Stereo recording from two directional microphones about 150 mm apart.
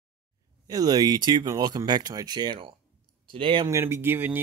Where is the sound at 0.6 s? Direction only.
25° right (ahead or behind).